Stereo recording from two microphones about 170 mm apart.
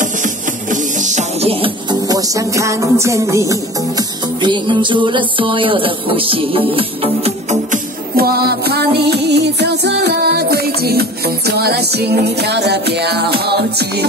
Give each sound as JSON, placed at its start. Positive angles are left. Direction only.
{"t": 0.0, "sound": "music", "side_deg": -50}
{"t": 8.2, "sound": "music", "side_deg": -65}